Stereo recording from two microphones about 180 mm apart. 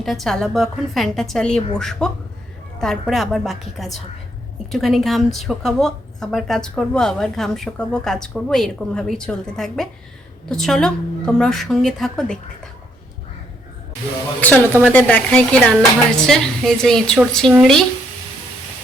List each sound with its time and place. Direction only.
0.0 s a woman's voice: centre (ahead or behind)
14.4 s a woman's voice: 10° left (ahead or behind)